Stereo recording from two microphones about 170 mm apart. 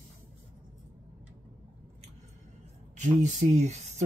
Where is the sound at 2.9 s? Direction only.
45° right (ahead or behind).